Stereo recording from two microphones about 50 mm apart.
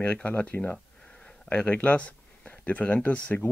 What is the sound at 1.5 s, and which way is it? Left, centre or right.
Speech, left.